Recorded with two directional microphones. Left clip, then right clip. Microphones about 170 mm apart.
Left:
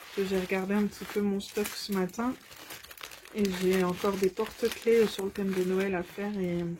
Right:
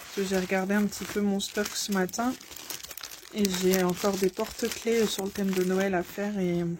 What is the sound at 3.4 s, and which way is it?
Speech, 55° right (ahead or behind).